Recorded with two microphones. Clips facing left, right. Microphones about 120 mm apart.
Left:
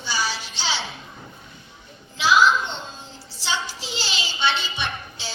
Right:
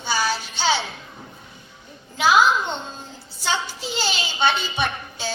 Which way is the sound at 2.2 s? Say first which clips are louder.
Right 1 dB; 50° right (ahead or behind).